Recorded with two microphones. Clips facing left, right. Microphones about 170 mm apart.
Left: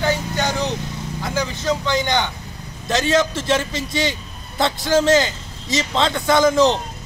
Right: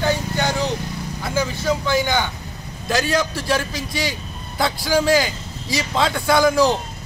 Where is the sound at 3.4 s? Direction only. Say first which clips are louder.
Left 2 dB; 25° left (ahead or behind).